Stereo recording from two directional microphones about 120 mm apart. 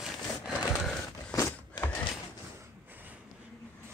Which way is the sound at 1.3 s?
30° left (ahead or behind).